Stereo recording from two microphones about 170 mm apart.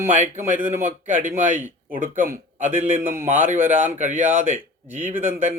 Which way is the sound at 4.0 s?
50° right (ahead or behind).